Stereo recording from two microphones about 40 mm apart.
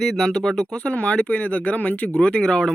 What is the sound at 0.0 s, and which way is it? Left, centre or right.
Speech, centre.